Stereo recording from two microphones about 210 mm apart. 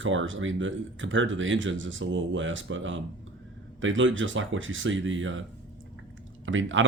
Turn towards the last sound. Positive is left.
turn(degrees=-65)  # may be behind; listen again after turning